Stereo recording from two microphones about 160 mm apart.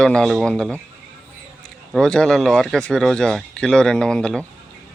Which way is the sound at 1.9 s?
5° left (ahead or behind).